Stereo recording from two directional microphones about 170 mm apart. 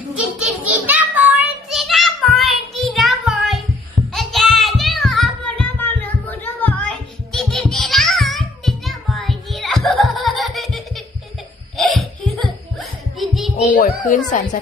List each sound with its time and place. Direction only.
0.2 s a sound: 5° right (ahead or behind)
1.7 s child singing: centre (ahead or behind)
7.3 s music: centre (ahead or behind)
13.7 s speech: 55° left (ahead or behind)